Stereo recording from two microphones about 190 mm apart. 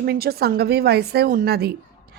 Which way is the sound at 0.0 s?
55° right (ahead or behind).